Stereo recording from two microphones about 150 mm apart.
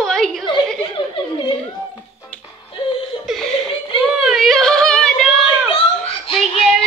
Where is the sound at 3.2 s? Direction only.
Centre (ahead or behind).